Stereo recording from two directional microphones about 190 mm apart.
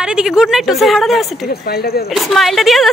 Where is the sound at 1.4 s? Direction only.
55° left (ahead or behind).